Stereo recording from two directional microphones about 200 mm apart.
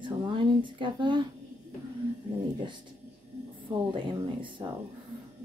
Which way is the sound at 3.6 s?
25° right (ahead or behind).